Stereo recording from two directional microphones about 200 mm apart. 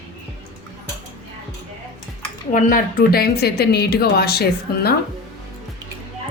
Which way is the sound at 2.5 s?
40° left (ahead or behind).